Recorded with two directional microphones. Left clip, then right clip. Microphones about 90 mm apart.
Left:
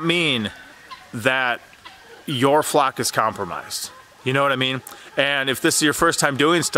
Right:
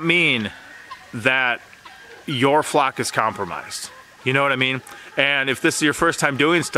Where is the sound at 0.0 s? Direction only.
20° left (ahead or behind).